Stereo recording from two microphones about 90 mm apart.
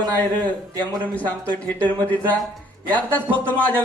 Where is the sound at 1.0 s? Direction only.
15° left (ahead or behind).